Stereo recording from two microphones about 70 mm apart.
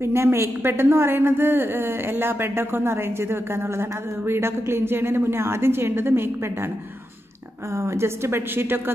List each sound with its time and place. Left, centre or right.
0.0 s a woman's voice: right
7.7 s a woman's voice: right